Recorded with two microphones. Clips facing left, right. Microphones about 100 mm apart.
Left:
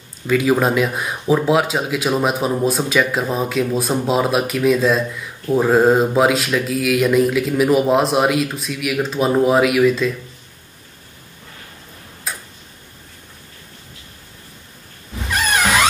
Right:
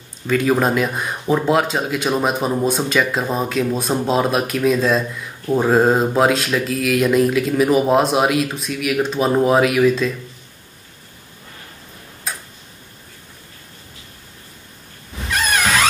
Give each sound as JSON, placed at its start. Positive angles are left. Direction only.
{"t": 0.3, "sound": "speech", "side_deg": 0}
{"t": 12.3, "sound": "tick-tock", "side_deg": 0}
{"t": 15.3, "sound": "a sound", "side_deg": 15}